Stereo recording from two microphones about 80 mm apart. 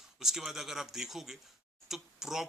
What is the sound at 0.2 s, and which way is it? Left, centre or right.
Speech, centre.